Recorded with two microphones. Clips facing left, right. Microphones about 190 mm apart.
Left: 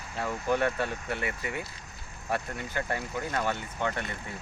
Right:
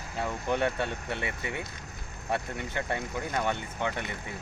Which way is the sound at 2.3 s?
20° right (ahead or behind).